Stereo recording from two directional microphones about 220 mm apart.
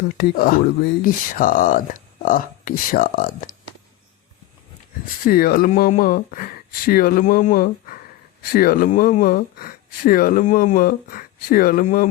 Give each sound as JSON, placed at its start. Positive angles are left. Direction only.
{"t": 0.2, "sound": "speech", "side_deg": 40}
{"t": 5.2, "sound": "speech", "side_deg": 40}